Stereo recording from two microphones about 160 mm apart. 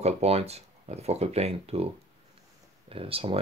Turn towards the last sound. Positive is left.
turn(degrees=-35)  # may be behind; listen again after turning